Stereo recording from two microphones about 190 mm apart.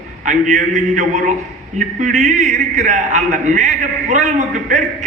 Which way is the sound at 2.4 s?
40° right (ahead or behind).